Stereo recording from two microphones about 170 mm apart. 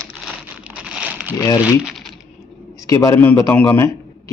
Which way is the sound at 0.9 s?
5° right (ahead or behind).